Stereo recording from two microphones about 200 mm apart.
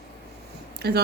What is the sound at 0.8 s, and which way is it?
Speech, 55° right (ahead or behind).